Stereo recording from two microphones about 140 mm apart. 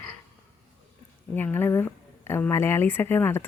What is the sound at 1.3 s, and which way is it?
Speech, 15° left (ahead or behind).